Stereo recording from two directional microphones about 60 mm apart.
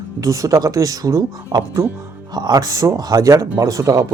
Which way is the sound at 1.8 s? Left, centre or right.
Right.